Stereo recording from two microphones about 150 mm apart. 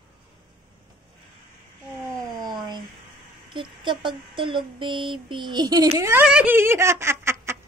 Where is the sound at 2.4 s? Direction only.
30° right (ahead or behind).